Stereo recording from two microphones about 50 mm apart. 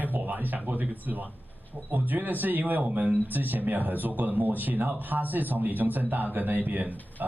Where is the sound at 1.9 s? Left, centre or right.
Right.